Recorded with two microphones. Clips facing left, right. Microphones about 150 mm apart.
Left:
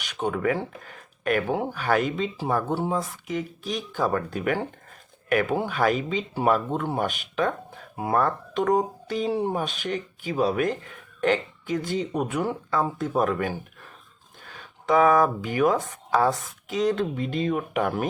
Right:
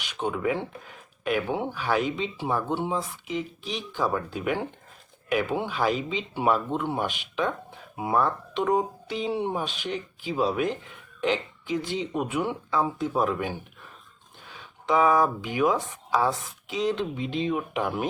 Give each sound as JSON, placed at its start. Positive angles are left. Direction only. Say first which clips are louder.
{"t": 0.0, "sound": "speech", "louder": "left 2 dB", "side_deg": 50}
{"t": 1.7, "sound": "speech", "louder": "left 2 dB", "side_deg": 50}
{"t": 14.6, "sound": "speech", "louder": "left 3 dB", "side_deg": 50}